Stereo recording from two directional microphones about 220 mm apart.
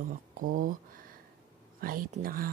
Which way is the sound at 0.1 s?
40° right (ahead or behind).